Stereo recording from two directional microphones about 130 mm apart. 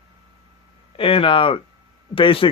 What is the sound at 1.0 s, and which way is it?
Speech, 45° left (ahead or behind).